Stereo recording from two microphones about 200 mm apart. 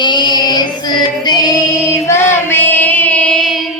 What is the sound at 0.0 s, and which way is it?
Music, 20° left (ahead or behind).